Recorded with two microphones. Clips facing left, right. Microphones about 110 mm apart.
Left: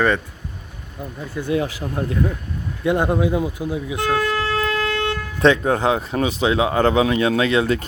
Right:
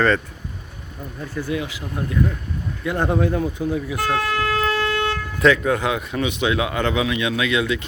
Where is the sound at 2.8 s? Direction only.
20° left (ahead or behind).